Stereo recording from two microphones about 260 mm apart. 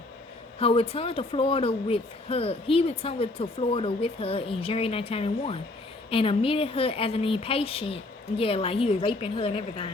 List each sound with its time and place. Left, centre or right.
0.6 s speech: left